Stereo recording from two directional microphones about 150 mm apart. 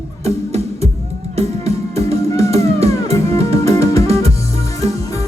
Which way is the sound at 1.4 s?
45° right (ahead or behind).